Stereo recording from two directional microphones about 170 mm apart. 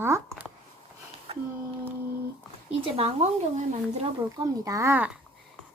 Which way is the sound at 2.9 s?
35° right (ahead or behind).